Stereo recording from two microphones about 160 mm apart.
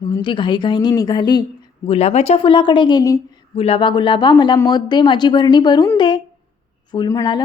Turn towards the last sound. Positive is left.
turn(degrees=25)  # may be behind; listen again after turning